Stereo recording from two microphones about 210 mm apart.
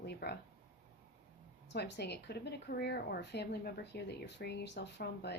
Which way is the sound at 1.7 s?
55° left (ahead or behind).